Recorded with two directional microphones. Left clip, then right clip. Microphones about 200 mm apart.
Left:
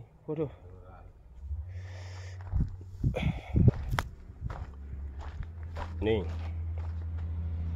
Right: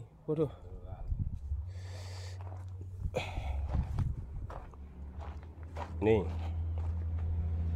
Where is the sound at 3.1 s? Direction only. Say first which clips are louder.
Left 1 dB; 10° right (ahead or behind).